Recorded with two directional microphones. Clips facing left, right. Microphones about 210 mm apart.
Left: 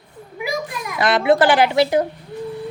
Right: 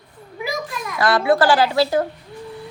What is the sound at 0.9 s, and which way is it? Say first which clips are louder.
Speech: left 1 dB; 20° left (ahead or behind).